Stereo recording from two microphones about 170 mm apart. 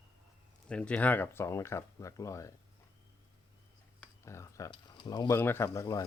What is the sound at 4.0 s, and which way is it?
Speech, 15° left (ahead or behind).